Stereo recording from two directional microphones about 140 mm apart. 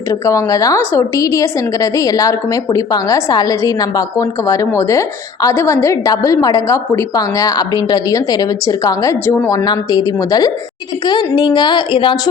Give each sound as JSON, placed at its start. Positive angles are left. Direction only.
{"t": 0.1, "sound": "a woman's voice", "side_deg": 25}
{"t": 9.5, "sound": "a woman's voice", "side_deg": 25}